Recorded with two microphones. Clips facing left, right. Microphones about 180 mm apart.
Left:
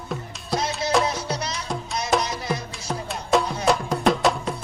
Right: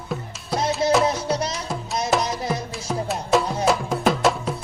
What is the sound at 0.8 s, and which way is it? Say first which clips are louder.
Music: right 6 dB; 55° right (ahead or behind).